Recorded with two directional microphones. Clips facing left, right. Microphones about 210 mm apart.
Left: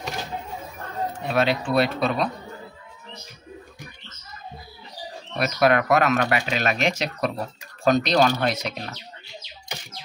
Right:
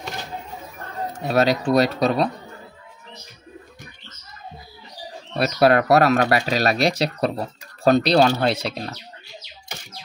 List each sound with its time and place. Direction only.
1.1 s speech: 40° right (ahead or behind)
5.4 s speech: 35° right (ahead or behind)